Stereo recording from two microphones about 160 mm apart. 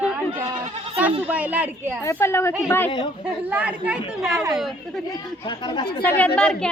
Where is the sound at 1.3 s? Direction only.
10° right (ahead or behind).